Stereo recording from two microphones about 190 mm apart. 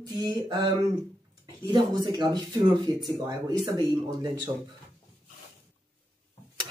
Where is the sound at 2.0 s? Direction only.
25° right (ahead or behind).